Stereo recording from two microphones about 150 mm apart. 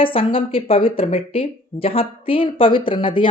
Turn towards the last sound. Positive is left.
turn(degrees=35)  # may be behind; listen again after turning